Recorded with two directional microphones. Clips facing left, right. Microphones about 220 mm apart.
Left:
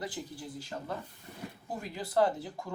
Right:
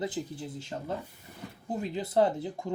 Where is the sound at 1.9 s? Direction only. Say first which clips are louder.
Right 2 dB; 25° right (ahead or behind).